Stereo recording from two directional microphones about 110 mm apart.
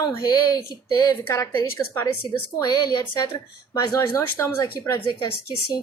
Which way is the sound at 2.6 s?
35° left (ahead or behind).